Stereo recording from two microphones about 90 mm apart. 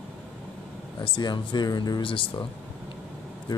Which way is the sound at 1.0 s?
60° left (ahead or behind).